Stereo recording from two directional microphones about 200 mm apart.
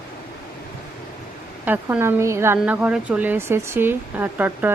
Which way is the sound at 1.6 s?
10° right (ahead or behind).